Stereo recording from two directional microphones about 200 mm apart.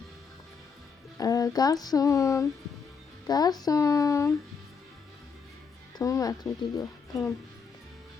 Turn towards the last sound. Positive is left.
turn(degrees=15)  # may be behind; listen again after turning